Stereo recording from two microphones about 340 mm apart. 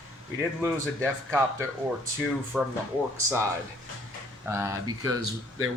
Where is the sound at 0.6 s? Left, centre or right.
Centre.